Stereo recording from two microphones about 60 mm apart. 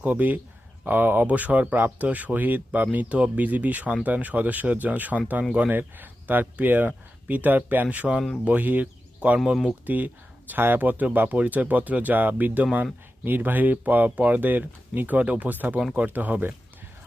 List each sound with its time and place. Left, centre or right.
0.0 s speech: right